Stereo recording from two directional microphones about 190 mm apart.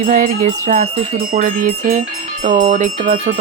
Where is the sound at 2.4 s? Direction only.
40° right (ahead or behind).